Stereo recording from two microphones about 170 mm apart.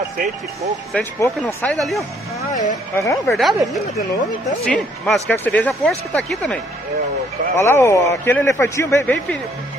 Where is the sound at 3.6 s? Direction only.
Centre (ahead or behind).